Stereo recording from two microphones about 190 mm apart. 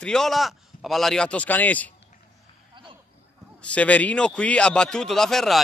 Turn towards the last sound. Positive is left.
turn(degrees=0)  # may be behind; listen again after turning